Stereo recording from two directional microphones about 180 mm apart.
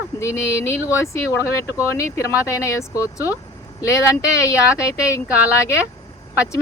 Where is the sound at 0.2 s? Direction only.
15° left (ahead or behind).